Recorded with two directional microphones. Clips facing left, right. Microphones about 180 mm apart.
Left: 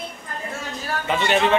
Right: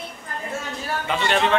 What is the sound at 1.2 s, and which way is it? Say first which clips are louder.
Speech: left 2 dB; 5° left (ahead or behind).